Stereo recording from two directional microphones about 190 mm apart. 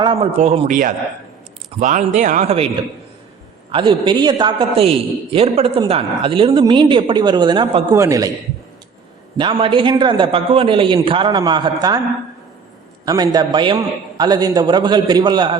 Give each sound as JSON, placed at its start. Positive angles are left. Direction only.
{"t": 0.0, "sound": "speech", "side_deg": -30}
{"t": 0.7, "sound": "a man's voice", "side_deg": -45}
{"t": 3.7, "sound": "a man's voice", "side_deg": -25}
{"t": 7.9, "sound": "a man's voice", "side_deg": -15}
{"t": 9.4, "sound": "a man's voice", "side_deg": -30}
{"t": 13.1, "sound": "a man's voice", "side_deg": -20}